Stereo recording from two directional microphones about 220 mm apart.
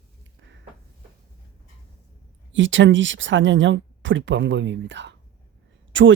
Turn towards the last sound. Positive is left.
turn(degrees=-60)  # may be behind; listen again after turning